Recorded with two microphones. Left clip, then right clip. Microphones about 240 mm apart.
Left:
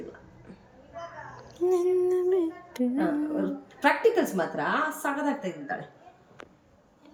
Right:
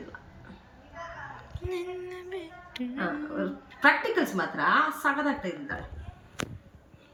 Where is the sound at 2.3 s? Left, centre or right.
Left.